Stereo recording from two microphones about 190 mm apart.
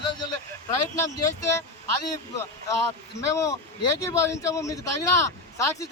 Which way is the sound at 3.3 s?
15° left (ahead or behind).